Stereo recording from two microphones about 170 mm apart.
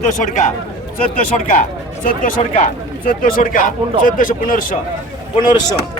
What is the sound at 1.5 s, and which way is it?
Speech, 50° left (ahead or behind).